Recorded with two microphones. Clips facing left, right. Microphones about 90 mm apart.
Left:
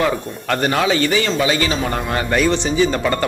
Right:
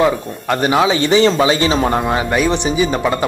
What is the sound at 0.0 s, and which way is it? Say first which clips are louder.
A man's voice: right 4 dB; 15° right (ahead or behind).